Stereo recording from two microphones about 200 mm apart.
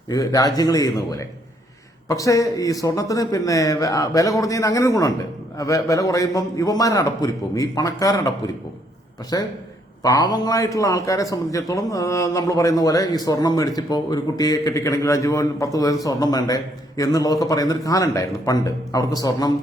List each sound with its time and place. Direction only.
0.1 s a man's voice: 20° left (ahead or behind)